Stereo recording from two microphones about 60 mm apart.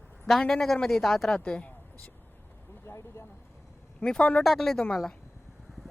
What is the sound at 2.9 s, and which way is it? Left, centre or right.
Vehicle, left.